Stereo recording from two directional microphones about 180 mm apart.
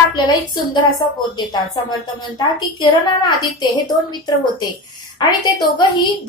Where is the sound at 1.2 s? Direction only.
25° left (ahead or behind).